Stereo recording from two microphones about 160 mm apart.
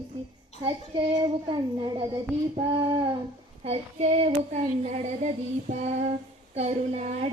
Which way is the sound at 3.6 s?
40° right (ahead or behind).